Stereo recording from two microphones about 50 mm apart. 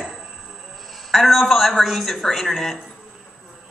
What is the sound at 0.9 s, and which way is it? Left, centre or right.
A man's voice, centre.